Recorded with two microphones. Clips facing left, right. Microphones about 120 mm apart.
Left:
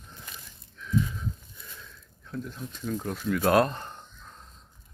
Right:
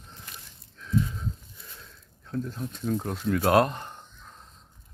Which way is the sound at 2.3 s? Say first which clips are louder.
Right 4 dB; 40° right (ahead or behind).